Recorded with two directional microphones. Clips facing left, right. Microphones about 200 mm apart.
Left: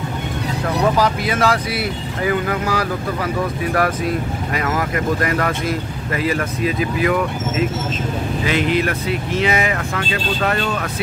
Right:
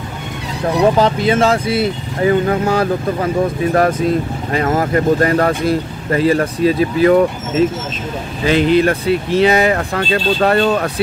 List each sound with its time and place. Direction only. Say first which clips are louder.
0.8 s speech: right 5 dB; 25° right (ahead or behind)